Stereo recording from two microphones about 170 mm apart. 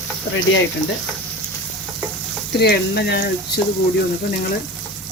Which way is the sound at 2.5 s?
75° left (ahead or behind).